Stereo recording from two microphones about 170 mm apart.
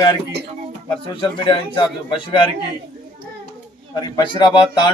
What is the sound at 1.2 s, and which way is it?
A man's voice, 30° left (ahead or behind).